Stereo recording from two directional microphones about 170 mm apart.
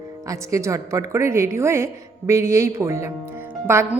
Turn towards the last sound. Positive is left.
turn(degrees=-15)  # may be behind; listen again after turning